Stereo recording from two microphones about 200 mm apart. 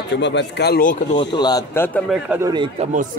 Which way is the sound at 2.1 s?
5° right (ahead or behind).